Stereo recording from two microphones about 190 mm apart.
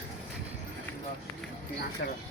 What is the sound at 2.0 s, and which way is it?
Speech, 50° left (ahead or behind).